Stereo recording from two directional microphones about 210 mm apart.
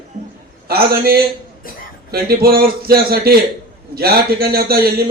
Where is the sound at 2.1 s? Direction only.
45° right (ahead or behind).